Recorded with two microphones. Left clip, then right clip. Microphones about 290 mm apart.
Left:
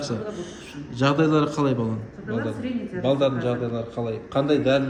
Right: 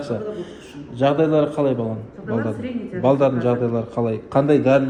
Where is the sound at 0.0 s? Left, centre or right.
Centre.